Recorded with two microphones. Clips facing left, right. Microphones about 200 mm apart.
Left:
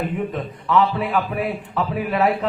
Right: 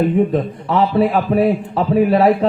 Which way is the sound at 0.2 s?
35° right (ahead or behind).